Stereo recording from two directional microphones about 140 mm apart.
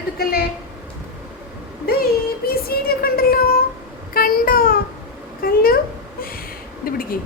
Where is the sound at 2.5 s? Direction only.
90° left.